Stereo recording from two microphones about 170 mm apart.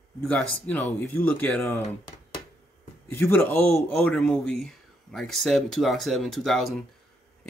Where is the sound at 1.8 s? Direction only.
25° left (ahead or behind).